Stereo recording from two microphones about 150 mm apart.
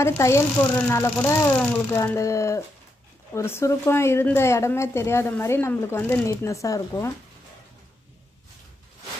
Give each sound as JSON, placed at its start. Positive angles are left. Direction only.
{"t": 0.0, "sound": "speech", "side_deg": 20}